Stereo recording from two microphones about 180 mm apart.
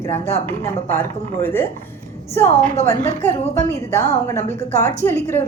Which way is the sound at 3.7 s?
15° left (ahead or behind).